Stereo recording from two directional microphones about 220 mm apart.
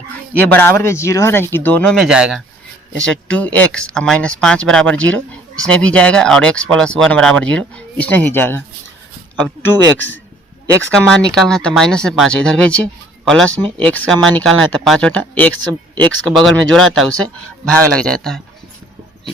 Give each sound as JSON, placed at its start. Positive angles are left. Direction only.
{"t": 0.4, "sound": "speech", "side_deg": 10}
{"t": 10.9, "sound": "speech", "side_deg": 5}
{"t": 13.6, "sound": "speech", "side_deg": -25}
{"t": 13.8, "sound": "speech", "side_deg": 5}